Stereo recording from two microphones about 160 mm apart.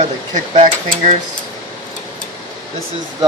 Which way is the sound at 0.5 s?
45° right (ahead or behind).